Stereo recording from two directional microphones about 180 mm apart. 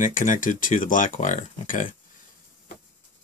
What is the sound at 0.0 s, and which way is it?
Speech, 45° left (ahead or behind).